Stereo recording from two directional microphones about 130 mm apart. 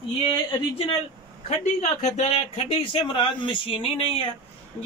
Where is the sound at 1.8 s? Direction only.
65° left (ahead or behind).